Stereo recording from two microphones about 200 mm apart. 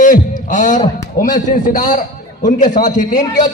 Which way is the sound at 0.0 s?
40° left (ahead or behind).